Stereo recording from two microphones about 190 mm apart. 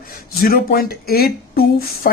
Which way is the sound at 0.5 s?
55° left (ahead or behind).